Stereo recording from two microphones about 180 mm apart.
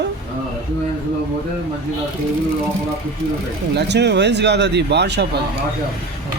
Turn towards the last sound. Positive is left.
turn(degrees=-70)  # may be behind; listen again after turning